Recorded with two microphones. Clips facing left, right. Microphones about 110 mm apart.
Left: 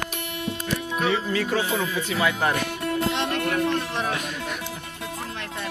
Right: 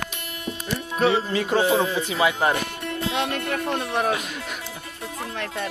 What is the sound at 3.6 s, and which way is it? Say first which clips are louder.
Speech: right 1 dB; 55° right (ahead or behind).